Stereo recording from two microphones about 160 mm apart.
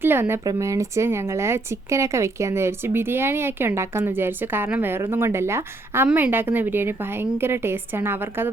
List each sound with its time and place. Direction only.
0.0 s speech: 15° right (ahead or behind)